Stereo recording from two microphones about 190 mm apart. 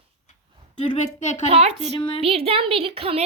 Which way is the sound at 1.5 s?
30° right (ahead or behind).